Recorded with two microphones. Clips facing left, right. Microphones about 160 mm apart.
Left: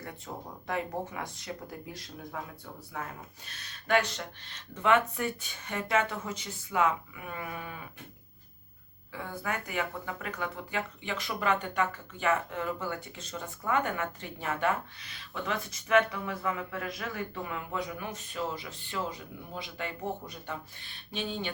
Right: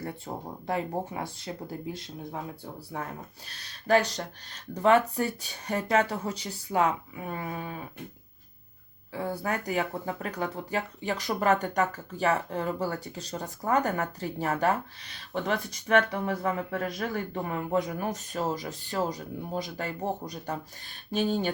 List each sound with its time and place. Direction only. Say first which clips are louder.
0.3 s speech: right 3 dB; 35° right (ahead or behind)
9.1 s speech: right 5 dB; 35° right (ahead or behind)